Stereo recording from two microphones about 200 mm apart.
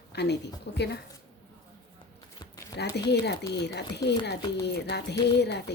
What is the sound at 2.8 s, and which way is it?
Speech, 55° left (ahead or behind).